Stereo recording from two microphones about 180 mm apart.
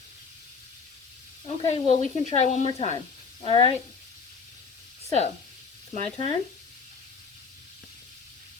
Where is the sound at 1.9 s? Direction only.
40° left (ahead or behind).